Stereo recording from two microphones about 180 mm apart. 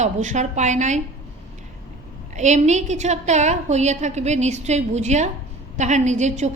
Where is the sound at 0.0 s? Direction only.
40° right (ahead or behind).